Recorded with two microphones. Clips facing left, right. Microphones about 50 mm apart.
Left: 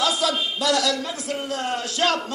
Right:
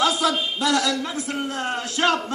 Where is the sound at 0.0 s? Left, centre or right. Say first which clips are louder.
Right 2 dB; right.